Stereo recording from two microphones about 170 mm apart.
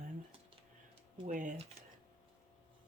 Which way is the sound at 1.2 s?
50° right (ahead or behind).